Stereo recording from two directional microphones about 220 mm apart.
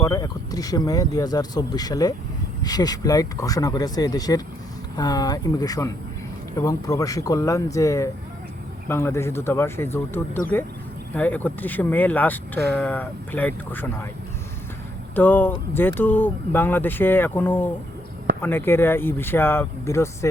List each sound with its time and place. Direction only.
0.0 s speech: 15° left (ahead or behind)
15.1 s speech: 10° left (ahead or behind)